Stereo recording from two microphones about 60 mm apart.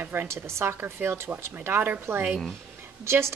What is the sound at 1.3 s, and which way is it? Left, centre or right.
Speech, right.